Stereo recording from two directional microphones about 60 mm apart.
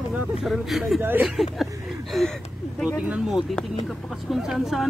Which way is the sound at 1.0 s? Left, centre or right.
Right.